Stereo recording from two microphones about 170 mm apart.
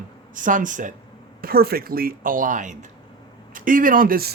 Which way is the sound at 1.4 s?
60° right (ahead or behind).